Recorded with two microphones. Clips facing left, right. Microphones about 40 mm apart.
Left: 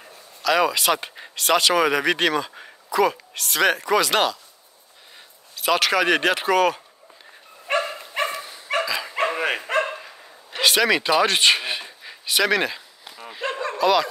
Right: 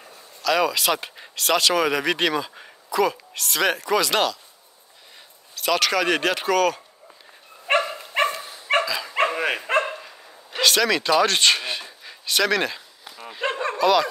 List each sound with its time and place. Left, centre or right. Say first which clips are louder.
0.4 s speech: left 1 dB; centre
5.6 s speech: left 2 dB; centre
7.7 s dog: right 2 dB; right
8.8 s dog: right 1 dB; centre
9.9 s a sound: left 1 dB; centre
13.4 s bow-wow: right 2 dB; right
13.7 s speech: even; centre